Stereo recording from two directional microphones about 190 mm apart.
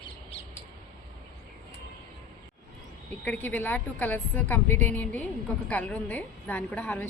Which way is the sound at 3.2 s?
10° left (ahead or behind).